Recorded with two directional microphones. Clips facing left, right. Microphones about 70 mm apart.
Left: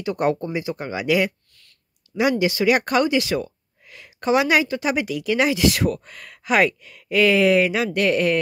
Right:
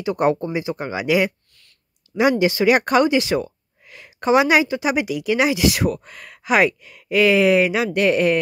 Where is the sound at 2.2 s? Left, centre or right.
Right.